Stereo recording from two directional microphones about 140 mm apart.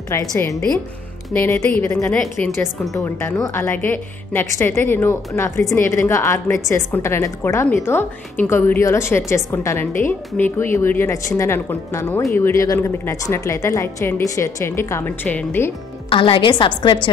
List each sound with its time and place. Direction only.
0.1 s a woman's voice: 20° left (ahead or behind)
16.1 s a woman's voice: 35° left (ahead or behind)